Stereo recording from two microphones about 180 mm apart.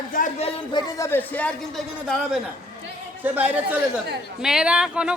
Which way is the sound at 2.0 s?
Centre (ahead or behind).